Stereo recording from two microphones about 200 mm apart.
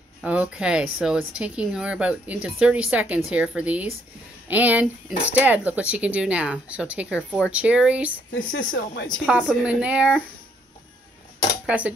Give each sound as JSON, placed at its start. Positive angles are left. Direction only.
{"t": 0.2, "sound": "speech", "side_deg": -5}
{"t": 8.3, "sound": "a woman's voice", "side_deg": 75}
{"t": 9.2, "sound": "speech", "side_deg": -5}
{"t": 11.6, "sound": "speech", "side_deg": -5}